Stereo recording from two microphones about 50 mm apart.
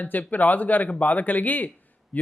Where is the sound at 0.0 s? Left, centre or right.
Left.